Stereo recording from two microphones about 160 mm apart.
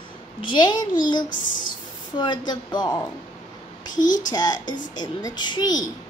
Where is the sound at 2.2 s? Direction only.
25° left (ahead or behind).